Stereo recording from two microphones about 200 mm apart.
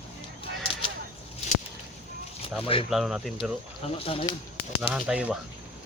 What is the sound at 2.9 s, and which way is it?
Speech, 5° right (ahead or behind).